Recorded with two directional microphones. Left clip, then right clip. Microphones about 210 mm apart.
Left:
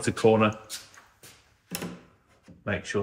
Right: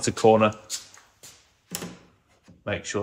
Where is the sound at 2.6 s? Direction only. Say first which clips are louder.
Right 1 dB; 25° right (ahead or behind).